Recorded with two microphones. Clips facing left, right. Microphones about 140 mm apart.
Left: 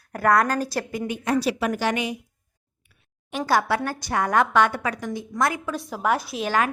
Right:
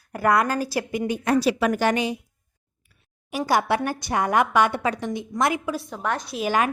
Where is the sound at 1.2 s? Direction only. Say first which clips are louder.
Right 2 dB; 75° right (ahead or behind).